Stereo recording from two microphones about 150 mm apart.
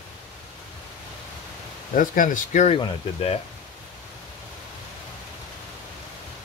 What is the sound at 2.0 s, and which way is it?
Speech, 65° left (ahead or behind).